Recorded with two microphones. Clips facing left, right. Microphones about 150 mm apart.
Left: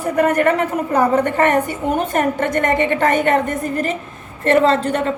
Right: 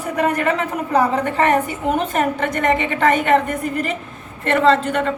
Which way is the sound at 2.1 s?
45° left (ahead or behind).